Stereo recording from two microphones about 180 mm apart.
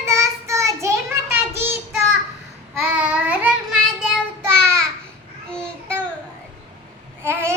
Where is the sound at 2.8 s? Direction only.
5° right (ahead or behind).